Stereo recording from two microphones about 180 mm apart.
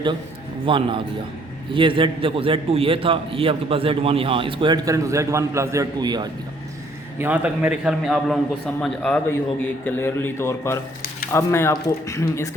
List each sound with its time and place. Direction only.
0.6 s a man's voice: 30° right (ahead or behind)
7.2 s a man's voice: 10° right (ahead or behind); by 12.5 s 15° left (ahead or behind)